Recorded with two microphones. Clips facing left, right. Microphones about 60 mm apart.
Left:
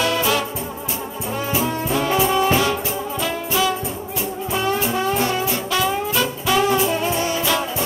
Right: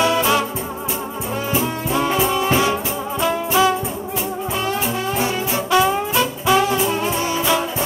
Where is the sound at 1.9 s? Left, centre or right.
Centre.